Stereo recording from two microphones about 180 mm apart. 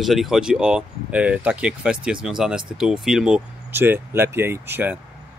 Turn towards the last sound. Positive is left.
turn(degrees=-10)  # may be behind; listen again after turning